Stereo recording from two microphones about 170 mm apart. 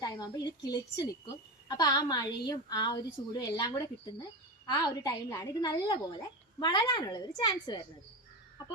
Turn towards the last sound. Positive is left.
turn(degrees=25)  # may be behind; listen again after turning